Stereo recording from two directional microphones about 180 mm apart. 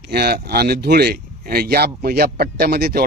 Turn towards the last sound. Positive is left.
turn(degrees=-60)  # may be behind; listen again after turning